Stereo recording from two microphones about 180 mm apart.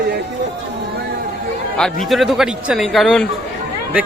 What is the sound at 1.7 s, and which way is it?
Speech, centre (ahead or behind).